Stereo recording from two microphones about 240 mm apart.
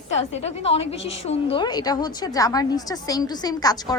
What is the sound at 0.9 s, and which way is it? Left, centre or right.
Speech, left.